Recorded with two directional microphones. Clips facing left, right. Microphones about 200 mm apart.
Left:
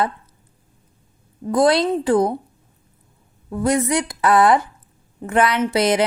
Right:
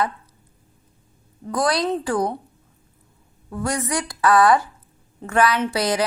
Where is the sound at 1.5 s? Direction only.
25° left (ahead or behind).